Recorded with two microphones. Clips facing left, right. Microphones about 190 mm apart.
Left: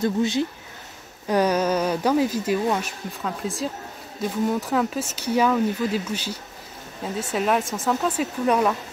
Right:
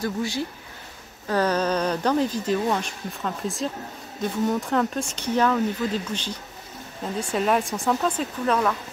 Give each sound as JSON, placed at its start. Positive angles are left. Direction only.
{"t": 0.0, "sound": "speech", "side_deg": 20}
{"t": 8.5, "sound": "speech", "side_deg": 15}